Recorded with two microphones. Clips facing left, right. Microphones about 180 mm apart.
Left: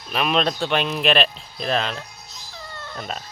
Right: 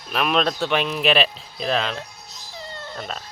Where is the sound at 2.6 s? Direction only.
25° right (ahead or behind).